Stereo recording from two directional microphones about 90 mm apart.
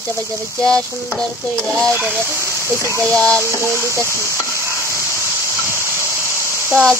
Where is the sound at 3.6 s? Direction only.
30° right (ahead or behind).